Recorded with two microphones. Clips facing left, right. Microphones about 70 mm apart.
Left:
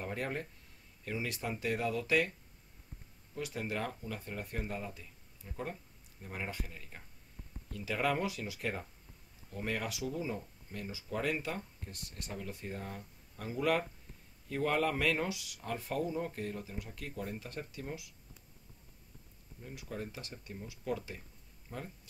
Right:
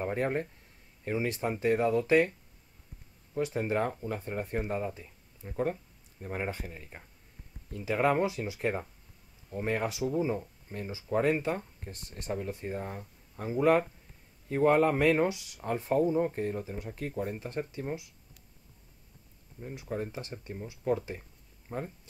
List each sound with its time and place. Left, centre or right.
0.0 s speech: right
3.3 s speech: right
19.6 s speech: right